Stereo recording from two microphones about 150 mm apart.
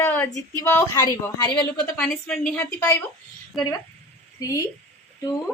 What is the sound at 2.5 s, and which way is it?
A woman's voice, 15° left (ahead or behind).